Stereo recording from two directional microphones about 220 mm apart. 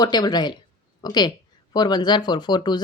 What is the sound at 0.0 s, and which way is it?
Speech, 20° left (ahead or behind).